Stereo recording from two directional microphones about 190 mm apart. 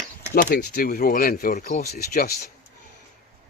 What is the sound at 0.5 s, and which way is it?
Speech, 55° left (ahead or behind).